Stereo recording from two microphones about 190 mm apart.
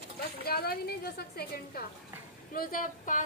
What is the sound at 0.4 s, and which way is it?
A woman's voice, 55° left (ahead or behind).